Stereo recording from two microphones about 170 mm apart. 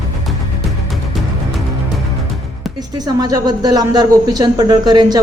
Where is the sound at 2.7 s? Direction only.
25° right (ahead or behind).